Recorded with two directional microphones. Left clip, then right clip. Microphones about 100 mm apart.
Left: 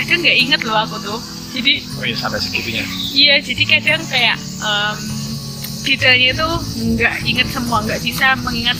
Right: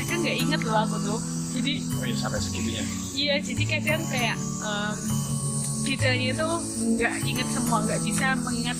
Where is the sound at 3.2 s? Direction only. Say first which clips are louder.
Left 14 dB; 25° right (ahead or behind).